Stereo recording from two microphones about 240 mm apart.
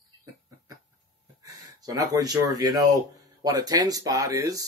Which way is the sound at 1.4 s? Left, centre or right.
Centre.